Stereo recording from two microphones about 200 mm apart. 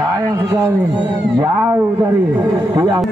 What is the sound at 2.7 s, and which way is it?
Speech, 20° right (ahead or behind).